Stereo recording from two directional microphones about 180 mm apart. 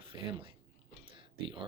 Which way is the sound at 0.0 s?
30° right (ahead or behind).